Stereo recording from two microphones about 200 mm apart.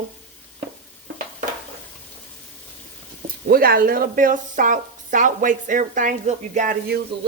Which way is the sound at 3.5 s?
50° right (ahead or behind).